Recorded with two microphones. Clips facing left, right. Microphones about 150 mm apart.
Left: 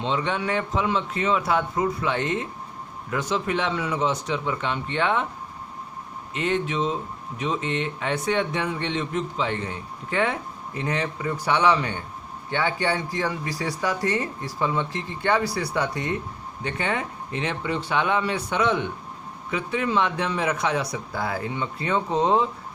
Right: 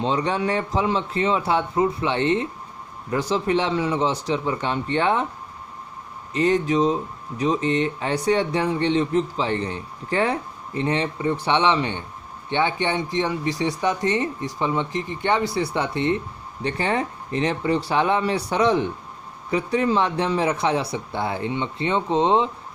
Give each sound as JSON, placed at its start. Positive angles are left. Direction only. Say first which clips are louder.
{"t": 0.0, "sound": "a man's voice", "louder": "right 3 dB", "side_deg": -35}
{"t": 6.3, "sound": "a man's voice", "louder": "right 6 dB", "side_deg": -35}